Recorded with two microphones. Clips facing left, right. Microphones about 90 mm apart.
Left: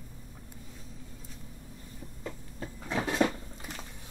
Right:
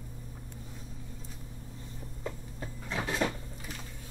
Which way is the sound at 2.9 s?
25° left (ahead or behind).